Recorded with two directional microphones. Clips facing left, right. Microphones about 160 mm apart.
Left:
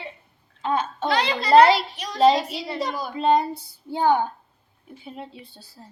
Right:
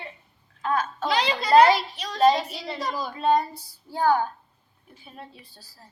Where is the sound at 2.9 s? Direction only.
10° left (ahead or behind).